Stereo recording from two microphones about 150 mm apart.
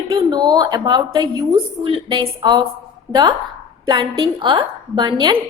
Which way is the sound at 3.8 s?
30° right (ahead or behind).